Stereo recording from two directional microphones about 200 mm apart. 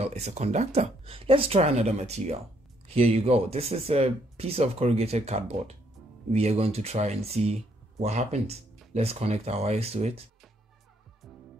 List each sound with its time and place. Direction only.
0.0 s speech: 35° right (ahead or behind)